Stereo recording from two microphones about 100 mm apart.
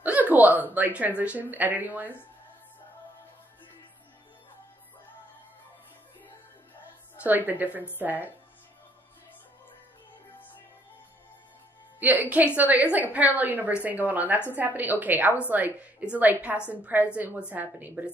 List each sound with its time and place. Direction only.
0.0 s a woman's voice: 15° right (ahead or behind)
7.2 s a woman's voice: 15° right (ahead or behind)
12.0 s a woman's voice: 15° right (ahead or behind)